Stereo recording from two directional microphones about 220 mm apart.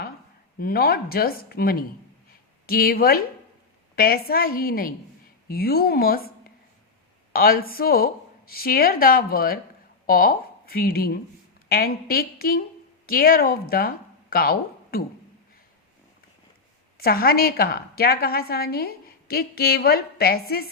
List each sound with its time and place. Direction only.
0.6 s a woman's voice: 45° left (ahead or behind)
17.0 s a woman's voice: 45° left (ahead or behind)